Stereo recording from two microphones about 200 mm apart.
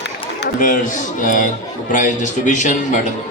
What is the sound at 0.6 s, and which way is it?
A man's voice, 40° left (ahead or behind).